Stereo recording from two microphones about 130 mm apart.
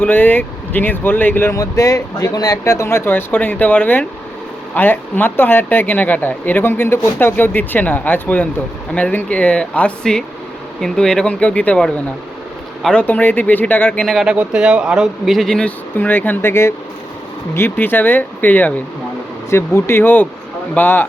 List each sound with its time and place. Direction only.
0.0 s speech: 15° left (ahead or behind)